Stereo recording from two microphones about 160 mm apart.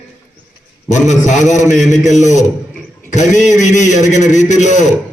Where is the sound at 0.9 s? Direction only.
50° left (ahead or behind).